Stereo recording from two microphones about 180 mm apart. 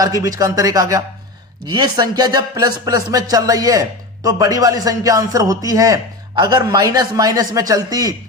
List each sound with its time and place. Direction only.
0.2 s speech: 20° right (ahead or behind)